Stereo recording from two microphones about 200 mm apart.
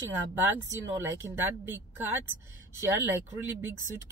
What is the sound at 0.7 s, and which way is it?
Speech, 10° right (ahead or behind).